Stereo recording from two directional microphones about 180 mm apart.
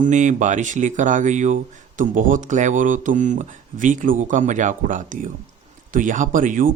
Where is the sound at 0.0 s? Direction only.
40° right (ahead or behind).